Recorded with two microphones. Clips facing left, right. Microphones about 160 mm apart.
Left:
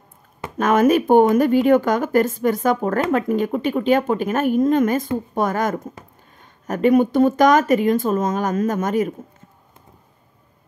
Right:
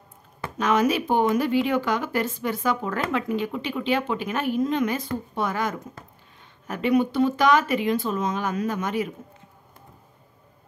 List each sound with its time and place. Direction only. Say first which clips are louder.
0.6 s speech: left 6 dB; 50° left (ahead or behind)